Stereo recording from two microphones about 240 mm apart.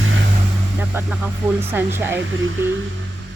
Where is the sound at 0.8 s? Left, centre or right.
Centre.